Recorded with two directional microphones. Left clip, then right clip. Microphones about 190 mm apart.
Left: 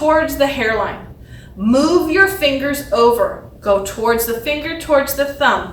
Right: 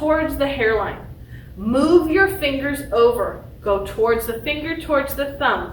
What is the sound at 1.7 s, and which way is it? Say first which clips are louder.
A woman's voice: left 2 dB; 20° left (ahead or behind).